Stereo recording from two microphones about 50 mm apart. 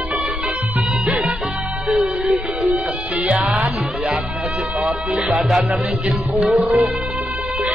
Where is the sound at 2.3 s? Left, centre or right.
Right.